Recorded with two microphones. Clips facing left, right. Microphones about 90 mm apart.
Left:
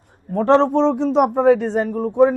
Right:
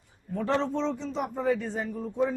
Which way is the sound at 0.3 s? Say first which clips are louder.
Left 13 dB; 65° left (ahead or behind).